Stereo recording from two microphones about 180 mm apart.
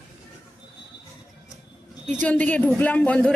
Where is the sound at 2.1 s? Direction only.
10° left (ahead or behind).